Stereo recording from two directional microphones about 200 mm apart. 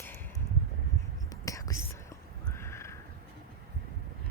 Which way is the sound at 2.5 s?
15° left (ahead or behind).